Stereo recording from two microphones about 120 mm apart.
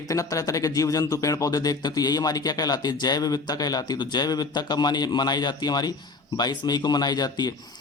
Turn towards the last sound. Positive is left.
turn(degrees=35)  # may be behind; listen again after turning